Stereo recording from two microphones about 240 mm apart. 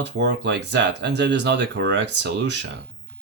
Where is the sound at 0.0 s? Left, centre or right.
Right.